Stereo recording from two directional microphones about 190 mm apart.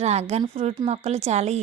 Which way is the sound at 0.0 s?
35° right (ahead or behind).